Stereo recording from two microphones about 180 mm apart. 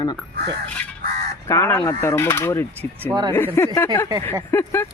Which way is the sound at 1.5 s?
15° left (ahead or behind).